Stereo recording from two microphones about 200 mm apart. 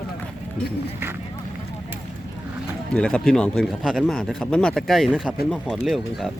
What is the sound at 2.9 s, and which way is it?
Speech, 5° left (ahead or behind).